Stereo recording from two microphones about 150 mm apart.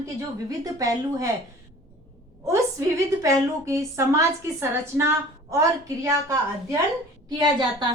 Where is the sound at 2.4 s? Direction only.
20° right (ahead or behind).